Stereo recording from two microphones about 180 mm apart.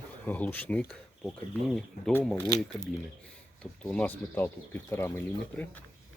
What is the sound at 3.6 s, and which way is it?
Speech, 5° left (ahead or behind).